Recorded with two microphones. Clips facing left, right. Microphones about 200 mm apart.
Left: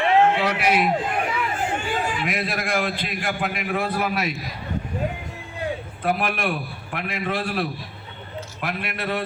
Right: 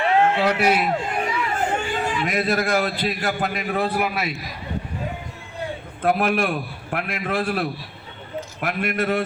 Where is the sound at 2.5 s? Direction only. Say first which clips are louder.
Right 4 dB; 40° right (ahead or behind).